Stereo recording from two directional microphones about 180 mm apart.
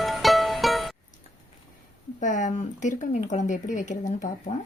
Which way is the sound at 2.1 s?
45° left (ahead or behind).